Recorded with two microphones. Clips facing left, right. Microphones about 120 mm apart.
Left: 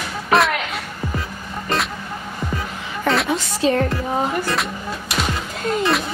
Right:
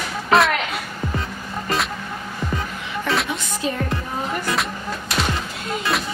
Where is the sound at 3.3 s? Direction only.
90° left.